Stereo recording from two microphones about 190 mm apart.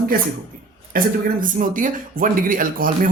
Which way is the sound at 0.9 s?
45° right (ahead or behind).